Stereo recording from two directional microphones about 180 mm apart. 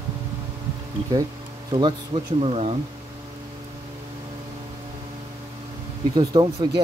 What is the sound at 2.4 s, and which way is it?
Speech, 35° right (ahead or behind).